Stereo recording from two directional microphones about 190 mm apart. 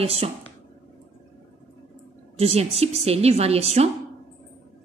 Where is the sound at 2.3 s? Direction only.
35° right (ahead or behind).